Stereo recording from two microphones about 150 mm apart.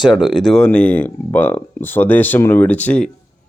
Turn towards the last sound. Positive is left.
turn(degrees=10)  # may be behind; listen again after turning